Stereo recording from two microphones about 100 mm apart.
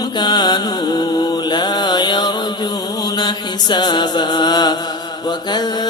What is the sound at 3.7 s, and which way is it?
Mantra, 50° left (ahead or behind).